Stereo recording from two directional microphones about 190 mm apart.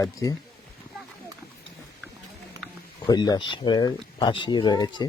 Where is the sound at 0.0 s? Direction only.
20° left (ahead or behind).